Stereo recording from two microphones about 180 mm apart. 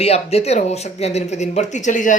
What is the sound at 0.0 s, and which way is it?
Speech, 35° left (ahead or behind).